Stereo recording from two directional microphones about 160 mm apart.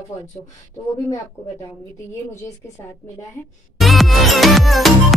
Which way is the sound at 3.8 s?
Centre (ahead or behind).